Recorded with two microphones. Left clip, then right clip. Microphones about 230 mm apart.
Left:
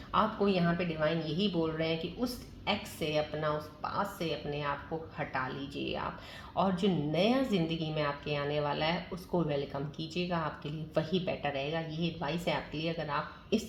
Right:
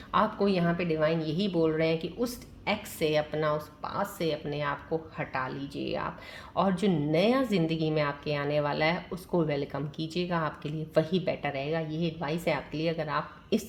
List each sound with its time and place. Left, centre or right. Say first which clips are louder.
0.1 s a woman's voice: right 3 dB; right